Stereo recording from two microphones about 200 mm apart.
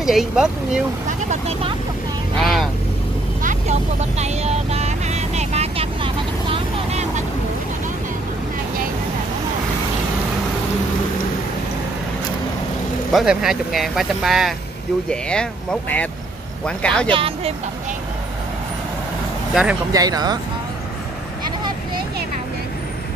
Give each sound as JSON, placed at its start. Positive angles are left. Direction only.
{"t": 0.0, "sound": "speech", "side_deg": 0}
{"t": 1.0, "sound": "speech", "side_deg": -35}
{"t": 2.3, "sound": "vehicle", "side_deg": 0}
{"t": 3.4, "sound": "vehicle", "side_deg": -35}
{"t": 13.1, "sound": "speech", "side_deg": 0}
{"t": 16.6, "sound": "speech", "side_deg": 5}
{"t": 17.1, "sound": "speech", "side_deg": -25}
{"t": 19.5, "sound": "speech", "side_deg": -5}
{"t": 19.9, "sound": "speech", "side_deg": -20}